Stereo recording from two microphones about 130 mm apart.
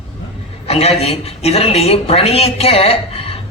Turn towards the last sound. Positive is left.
turn(degrees=50)  # may be behind; listen again after turning